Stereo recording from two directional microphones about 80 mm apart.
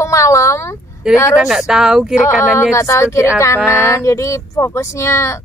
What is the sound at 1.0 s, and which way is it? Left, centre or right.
Speech, centre.